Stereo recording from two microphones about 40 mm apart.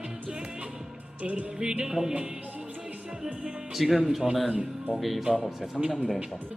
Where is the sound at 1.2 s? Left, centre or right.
Right.